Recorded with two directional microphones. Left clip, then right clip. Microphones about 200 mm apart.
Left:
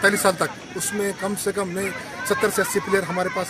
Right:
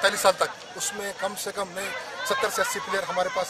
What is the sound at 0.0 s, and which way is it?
Speech, 25° right (ahead or behind).